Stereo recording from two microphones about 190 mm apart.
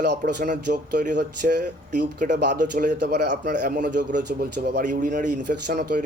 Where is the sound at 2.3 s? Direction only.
65° right (ahead or behind).